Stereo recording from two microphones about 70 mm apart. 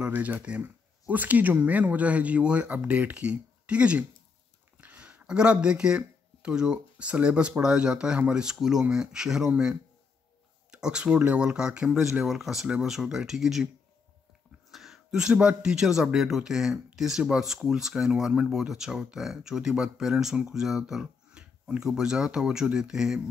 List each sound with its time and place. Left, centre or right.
0.0 s speech: right
10.7 s speech: centre
14.7 s a sound: centre
15.3 s speech: centre